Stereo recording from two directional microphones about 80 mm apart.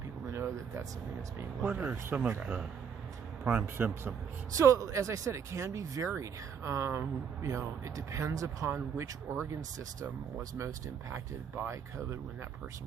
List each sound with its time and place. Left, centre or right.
0.3 s speech: right
4.5 s speech: right